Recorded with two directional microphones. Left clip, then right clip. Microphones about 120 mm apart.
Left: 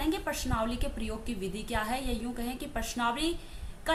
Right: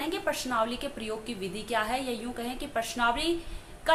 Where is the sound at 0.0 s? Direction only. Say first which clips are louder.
Right 2 dB; 30° left (ahead or behind).